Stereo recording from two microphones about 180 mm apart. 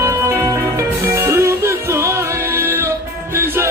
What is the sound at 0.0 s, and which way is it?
Music, 15° right (ahead or behind).